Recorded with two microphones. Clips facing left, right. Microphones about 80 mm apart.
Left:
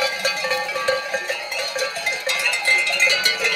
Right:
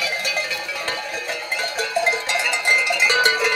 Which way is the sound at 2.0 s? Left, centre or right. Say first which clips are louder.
Right 3 dB; right.